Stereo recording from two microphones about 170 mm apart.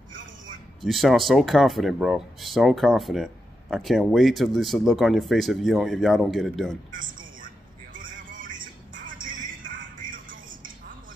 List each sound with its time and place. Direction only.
0.8 s speech: centre (ahead or behind)
6.9 s a sound: 50° right (ahead or behind)
9.7 s music: 50° right (ahead or behind)